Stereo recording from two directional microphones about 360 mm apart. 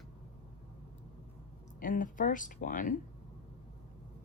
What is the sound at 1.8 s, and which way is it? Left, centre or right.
Speech, left.